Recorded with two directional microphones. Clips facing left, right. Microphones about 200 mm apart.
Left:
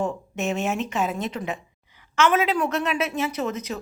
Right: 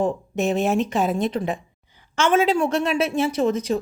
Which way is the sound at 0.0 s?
35° right (ahead or behind).